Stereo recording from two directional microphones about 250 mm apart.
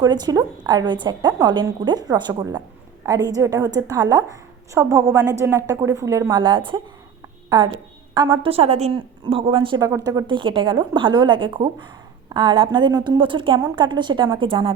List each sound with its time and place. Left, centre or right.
0.0 s a woman's voice: centre
8.1 s a woman's voice: centre